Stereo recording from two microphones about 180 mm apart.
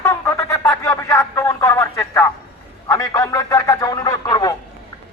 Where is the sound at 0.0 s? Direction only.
15° left (ahead or behind).